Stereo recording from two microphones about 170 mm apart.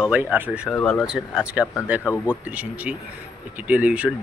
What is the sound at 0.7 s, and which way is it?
Speech, 5° left (ahead or behind).